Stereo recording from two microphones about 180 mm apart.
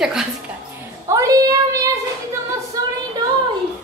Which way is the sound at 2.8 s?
20° right (ahead or behind).